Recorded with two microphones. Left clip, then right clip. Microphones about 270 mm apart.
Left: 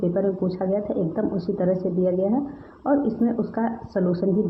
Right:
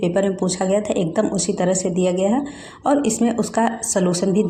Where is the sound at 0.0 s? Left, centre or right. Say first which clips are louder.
Right 4 dB; right.